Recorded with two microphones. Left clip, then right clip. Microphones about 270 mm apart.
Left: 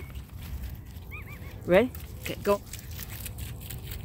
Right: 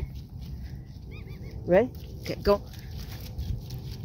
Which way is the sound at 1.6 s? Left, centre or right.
Left.